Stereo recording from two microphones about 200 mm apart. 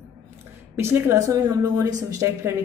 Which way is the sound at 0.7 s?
10° right (ahead or behind).